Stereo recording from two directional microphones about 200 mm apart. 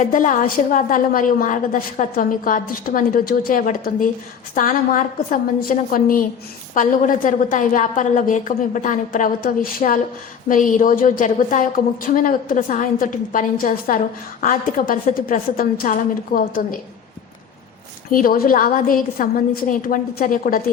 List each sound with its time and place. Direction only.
0.0 s a woman's voice: 40° left (ahead or behind)
18.1 s a woman's voice: 45° left (ahead or behind)